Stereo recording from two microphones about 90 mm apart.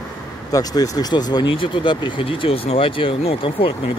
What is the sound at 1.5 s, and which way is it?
Speech, 70° left (ahead or behind).